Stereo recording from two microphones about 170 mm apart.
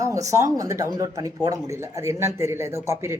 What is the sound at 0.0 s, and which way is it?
A man's voice, 20° right (ahead or behind).